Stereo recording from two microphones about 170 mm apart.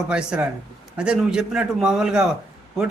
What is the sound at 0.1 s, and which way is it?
A man's voice, 5° right (ahead or behind).